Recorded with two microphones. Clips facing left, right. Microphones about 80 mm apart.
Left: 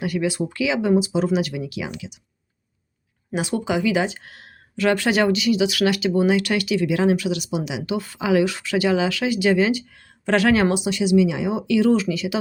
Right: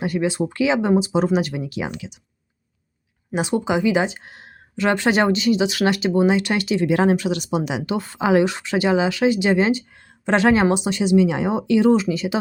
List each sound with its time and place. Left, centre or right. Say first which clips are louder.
0.0 s speech: right 2 dB; right
3.3 s speech: right 2 dB; right